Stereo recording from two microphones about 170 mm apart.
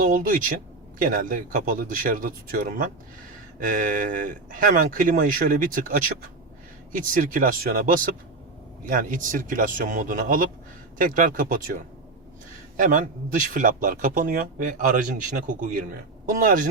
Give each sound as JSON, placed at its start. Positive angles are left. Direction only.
{"t": 0.0, "sound": "speech", "side_deg": -55}